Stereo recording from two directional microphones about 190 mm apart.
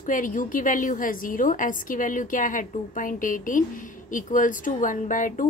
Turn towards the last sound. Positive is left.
turn(degrees=45)  # may be behind; listen again after turning